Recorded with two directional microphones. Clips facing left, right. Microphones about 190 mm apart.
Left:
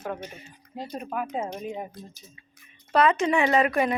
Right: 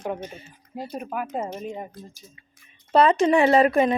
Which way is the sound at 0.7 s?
5° right (ahead or behind).